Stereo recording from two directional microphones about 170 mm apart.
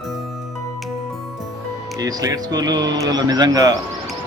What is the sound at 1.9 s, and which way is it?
Speech, 20° right (ahead or behind).